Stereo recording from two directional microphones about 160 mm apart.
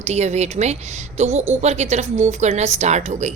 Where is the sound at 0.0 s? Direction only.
45° right (ahead or behind).